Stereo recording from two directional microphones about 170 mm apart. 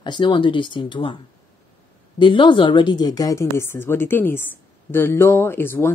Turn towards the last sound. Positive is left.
turn(degrees=15)  # may be behind; listen again after turning